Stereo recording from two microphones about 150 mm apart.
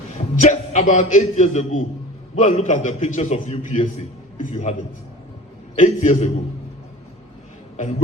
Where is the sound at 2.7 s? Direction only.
60° left (ahead or behind); by 3.8 s 40° left (ahead or behind).